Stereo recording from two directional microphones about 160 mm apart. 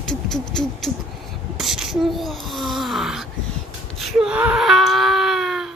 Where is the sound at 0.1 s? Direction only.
5° left (ahead or behind).